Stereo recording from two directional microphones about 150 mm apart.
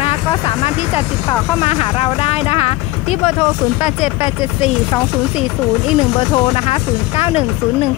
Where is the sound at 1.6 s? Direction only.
40° left (ahead or behind).